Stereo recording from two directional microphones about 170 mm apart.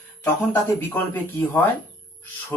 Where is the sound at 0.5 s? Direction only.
10° left (ahead or behind).